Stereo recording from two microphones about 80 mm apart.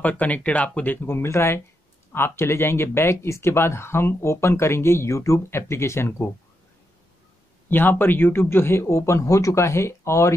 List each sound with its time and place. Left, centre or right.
0.0 s speech: centre
1.0 s speech: left
7.7 s speech: left